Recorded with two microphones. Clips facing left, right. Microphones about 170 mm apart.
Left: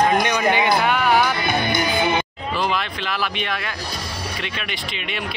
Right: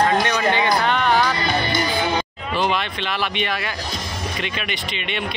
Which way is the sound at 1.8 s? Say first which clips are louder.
Left 1 dB; 20° left (ahead or behind).